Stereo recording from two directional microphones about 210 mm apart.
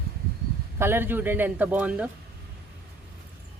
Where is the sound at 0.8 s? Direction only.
10° right (ahead or behind).